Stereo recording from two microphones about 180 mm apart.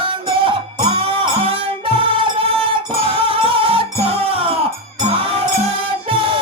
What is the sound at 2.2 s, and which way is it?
Music, 30° right (ahead or behind).